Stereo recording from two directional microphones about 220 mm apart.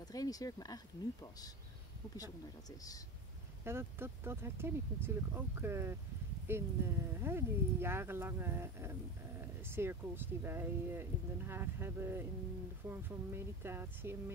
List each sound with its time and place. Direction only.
0.0 s speech: 15° left (ahead or behind)
3.6 s speech: 10° right (ahead or behind)